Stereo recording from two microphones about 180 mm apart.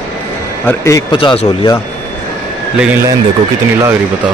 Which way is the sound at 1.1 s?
30° left (ahead or behind).